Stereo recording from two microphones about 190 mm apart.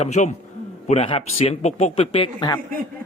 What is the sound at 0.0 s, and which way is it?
Speech, 40° left (ahead or behind).